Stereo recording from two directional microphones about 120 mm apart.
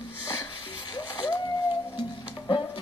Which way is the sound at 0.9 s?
35° left (ahead or behind).